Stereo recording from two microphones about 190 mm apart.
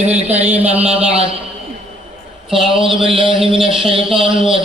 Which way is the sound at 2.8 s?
25° right (ahead or behind).